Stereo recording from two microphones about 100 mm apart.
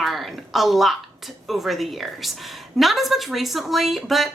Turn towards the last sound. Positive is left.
turn(degrees=0)  # may be behind; listen again after turning